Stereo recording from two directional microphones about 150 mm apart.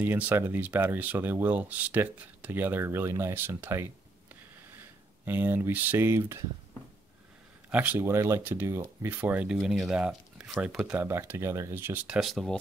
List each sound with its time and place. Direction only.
0.0 s speech: 10° right (ahead or behind)
5.2 s speech: 15° right (ahead or behind)
7.7 s speech: 10° right (ahead or behind)